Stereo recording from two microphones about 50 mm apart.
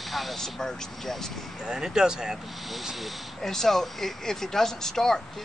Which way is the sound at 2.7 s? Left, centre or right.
Centre.